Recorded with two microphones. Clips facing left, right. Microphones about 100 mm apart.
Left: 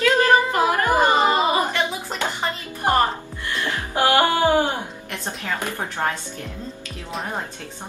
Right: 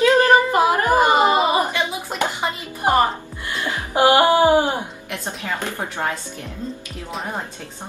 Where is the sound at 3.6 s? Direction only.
15° right (ahead or behind).